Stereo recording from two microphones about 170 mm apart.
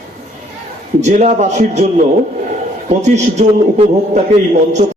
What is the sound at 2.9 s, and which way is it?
A man's voice, 40° right (ahead or behind).